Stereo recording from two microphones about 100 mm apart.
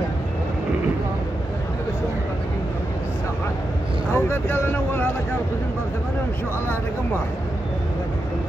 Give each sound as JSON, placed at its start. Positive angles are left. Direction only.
{"t": 4.1, "sound": "speech", "side_deg": 20}